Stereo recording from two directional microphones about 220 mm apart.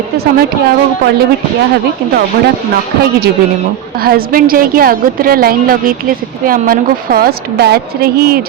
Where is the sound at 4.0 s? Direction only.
45° right (ahead or behind).